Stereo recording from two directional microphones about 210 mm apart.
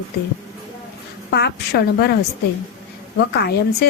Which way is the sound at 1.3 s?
50° left (ahead or behind).